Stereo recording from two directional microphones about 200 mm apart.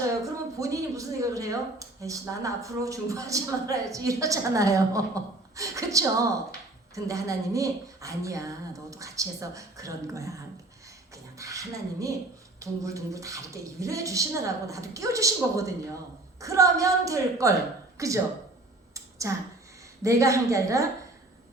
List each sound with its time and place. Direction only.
0.6 s speech: 15° right (ahead or behind)
17.9 s a sound: 15° right (ahead or behind)
20.0 s speech: 15° right (ahead or behind)